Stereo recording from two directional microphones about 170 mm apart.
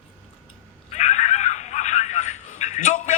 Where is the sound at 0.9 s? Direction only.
45° left (ahead or behind).